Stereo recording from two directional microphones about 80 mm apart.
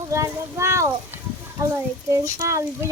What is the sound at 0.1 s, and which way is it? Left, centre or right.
Speech, right.